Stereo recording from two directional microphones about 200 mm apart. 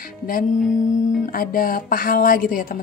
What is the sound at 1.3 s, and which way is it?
Speech, 45° left (ahead or behind).